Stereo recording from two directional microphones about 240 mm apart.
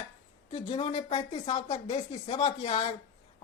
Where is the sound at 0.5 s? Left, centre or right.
Left.